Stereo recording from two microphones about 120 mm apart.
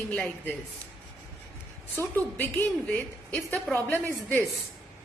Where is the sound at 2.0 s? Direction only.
15° left (ahead or behind).